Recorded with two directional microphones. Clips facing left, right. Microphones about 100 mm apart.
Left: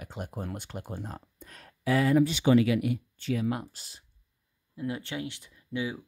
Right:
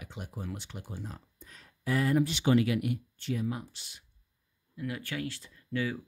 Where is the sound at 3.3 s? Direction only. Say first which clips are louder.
Left 4 dB; 75° left (ahead or behind).